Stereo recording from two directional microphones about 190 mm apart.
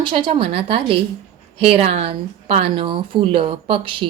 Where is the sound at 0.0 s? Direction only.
25° right (ahead or behind).